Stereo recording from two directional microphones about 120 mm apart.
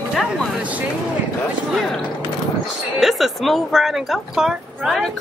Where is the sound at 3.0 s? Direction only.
Centre (ahead or behind).